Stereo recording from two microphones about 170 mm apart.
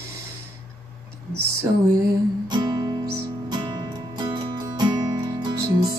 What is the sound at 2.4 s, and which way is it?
Music, 25° right (ahead or behind).